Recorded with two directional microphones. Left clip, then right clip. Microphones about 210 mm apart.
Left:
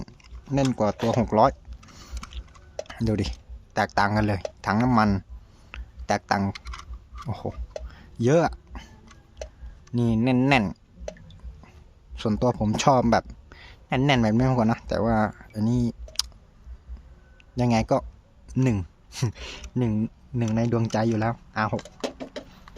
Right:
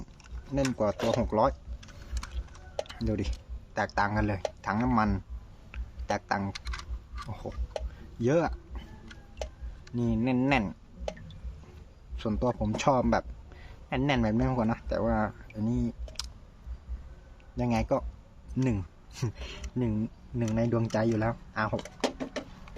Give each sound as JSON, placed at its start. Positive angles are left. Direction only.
{"t": 0.7, "sound": "speech", "side_deg": 50}
{"t": 1.8, "sound": "boat", "side_deg": 5}
{"t": 2.9, "sound": "speech", "side_deg": 50}
{"t": 5.7, "sound": "a sound", "side_deg": 50}
{"t": 6.7, "sound": "computer keyboard", "side_deg": 0}
{"t": 7.3, "sound": "speech", "side_deg": 50}
{"t": 8.2, "sound": "a sound", "side_deg": 50}
{"t": 9.9, "sound": "speech", "side_deg": 50}
{"t": 12.1, "sound": "speech", "side_deg": 50}
{"t": 17.6, "sound": "speech", "side_deg": 50}